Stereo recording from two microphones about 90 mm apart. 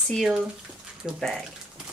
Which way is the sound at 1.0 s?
15° right (ahead or behind).